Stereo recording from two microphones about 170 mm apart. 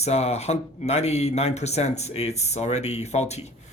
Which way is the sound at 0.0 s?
40° left (ahead or behind).